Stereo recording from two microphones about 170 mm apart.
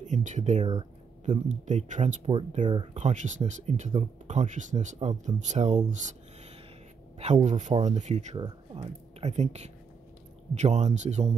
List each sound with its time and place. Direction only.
0.0 s speech: 45° right (ahead or behind)
7.4 s speech: 45° right (ahead or behind)